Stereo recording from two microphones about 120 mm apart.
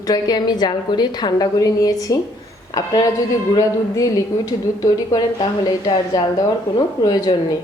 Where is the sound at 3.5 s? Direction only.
30° left (ahead or behind).